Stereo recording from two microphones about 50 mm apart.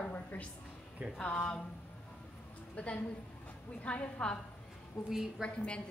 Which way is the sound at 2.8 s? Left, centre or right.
Left.